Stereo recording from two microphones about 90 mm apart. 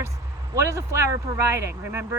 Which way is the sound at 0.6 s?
35° right (ahead or behind).